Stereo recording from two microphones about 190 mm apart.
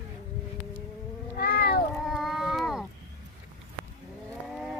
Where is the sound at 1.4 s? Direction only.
55° left (ahead or behind).